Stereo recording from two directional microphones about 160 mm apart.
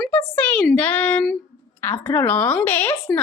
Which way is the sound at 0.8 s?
10° left (ahead or behind).